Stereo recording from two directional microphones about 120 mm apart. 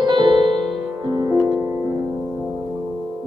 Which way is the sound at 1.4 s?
25° right (ahead or behind).